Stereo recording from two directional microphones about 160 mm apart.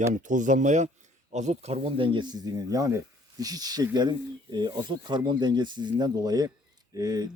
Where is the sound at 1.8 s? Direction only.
30° right (ahead or behind).